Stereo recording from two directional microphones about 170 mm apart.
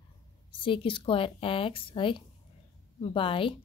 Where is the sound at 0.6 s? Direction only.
30° left (ahead or behind).